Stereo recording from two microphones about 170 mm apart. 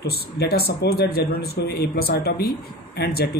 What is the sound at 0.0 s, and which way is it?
A man's voice, 65° left (ahead or behind).